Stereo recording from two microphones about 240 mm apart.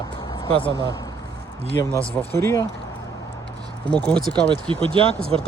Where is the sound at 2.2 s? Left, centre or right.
Centre.